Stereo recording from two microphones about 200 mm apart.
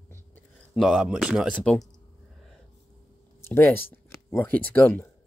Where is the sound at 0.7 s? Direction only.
Centre (ahead or behind).